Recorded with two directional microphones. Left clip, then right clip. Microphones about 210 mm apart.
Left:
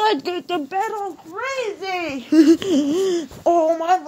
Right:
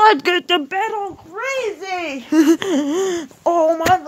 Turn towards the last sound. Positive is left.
turn(degrees=-10)  # may be behind; listen again after turning